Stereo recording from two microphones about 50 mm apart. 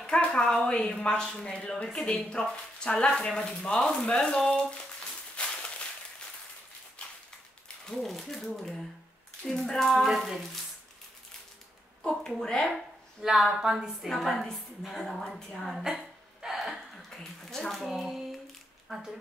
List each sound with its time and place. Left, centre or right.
0.0 s a sound: left
0.5 s a woman's voice: centre
5.4 s a sound: left
7.8 s a woman's voice: centre
12.0 s a woman's voice: centre
13.2 s speech: centre
14.0 s a woman's voice: centre
16.3 s a sound: centre
17.8 s a woman's voice: centre